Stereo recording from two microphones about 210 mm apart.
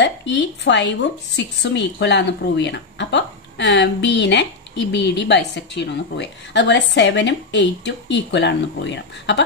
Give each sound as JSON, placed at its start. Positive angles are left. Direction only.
{"t": 0.0, "sound": "a woman's voice", "side_deg": 60}